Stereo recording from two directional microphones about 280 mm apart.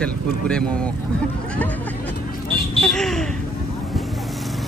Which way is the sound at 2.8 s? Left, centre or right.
Centre.